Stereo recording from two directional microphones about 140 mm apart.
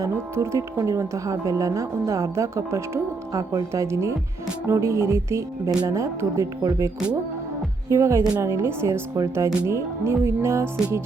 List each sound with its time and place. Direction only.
0.0 s speech: 20° right (ahead or behind)